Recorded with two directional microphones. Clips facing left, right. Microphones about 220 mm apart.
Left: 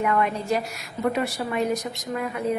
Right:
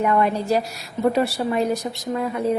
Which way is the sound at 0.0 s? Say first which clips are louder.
Right 4 dB; 35° right (ahead or behind).